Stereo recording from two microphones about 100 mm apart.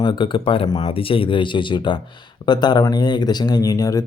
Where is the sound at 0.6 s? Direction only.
45° left (ahead or behind).